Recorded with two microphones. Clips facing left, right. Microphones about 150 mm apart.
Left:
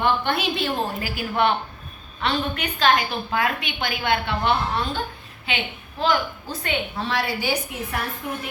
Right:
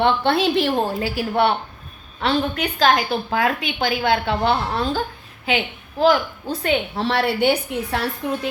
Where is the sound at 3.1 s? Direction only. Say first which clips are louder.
Right 4 dB; 40° right (ahead or behind).